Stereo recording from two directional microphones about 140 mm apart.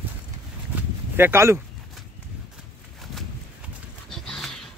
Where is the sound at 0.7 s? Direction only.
15° right (ahead or behind).